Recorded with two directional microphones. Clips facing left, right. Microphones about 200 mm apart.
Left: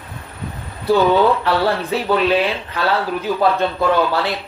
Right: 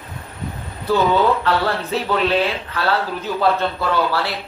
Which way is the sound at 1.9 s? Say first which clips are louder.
Left 1 dB; 15° left (ahead or behind).